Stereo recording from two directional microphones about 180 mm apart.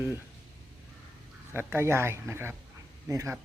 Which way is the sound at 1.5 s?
15° right (ahead or behind).